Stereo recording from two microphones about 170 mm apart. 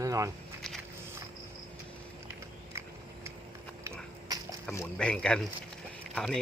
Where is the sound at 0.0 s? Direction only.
20° right (ahead or behind).